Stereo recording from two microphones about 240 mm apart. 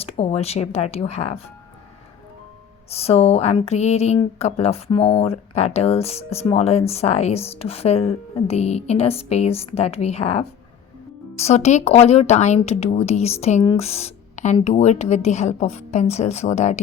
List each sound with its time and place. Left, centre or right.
0.0 s speech: left
2.9 s speech: left